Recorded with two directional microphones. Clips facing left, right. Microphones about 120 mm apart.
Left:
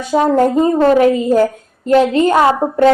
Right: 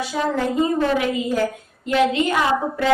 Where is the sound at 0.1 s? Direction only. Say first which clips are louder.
Left 13 dB; 45° left (ahead or behind).